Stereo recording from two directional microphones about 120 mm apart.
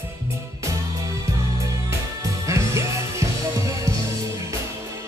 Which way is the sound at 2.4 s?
25° right (ahead or behind).